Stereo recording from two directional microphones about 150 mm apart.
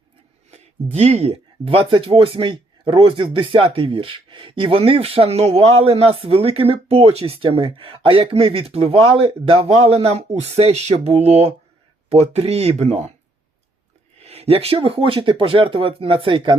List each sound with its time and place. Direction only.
0.5 s speech: 45° right (ahead or behind)
14.2 s speech: 45° right (ahead or behind)